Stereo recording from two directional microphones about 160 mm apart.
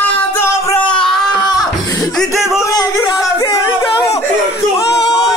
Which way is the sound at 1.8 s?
20° left (ahead or behind).